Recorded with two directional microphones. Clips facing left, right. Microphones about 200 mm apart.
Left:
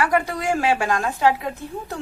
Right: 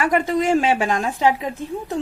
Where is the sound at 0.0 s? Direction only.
20° right (ahead or behind).